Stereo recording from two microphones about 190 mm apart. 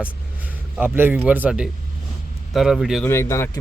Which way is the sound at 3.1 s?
15° left (ahead or behind).